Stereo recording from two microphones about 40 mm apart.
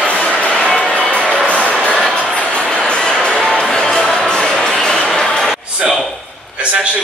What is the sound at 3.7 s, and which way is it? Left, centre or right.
Music, centre.